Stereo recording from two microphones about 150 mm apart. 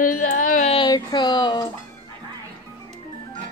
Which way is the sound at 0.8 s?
30° left (ahead or behind).